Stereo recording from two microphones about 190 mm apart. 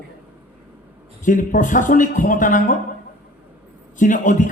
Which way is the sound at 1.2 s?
45° left (ahead or behind).